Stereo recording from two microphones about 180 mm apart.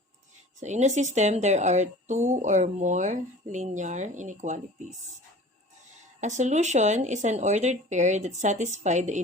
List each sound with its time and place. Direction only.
0.6 s a woman's voice: 40° right (ahead or behind)
6.1 s a woman's voice: 40° right (ahead or behind)